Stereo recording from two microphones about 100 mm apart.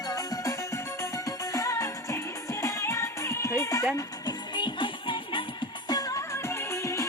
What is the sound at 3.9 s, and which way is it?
Music, 45° left (ahead or behind).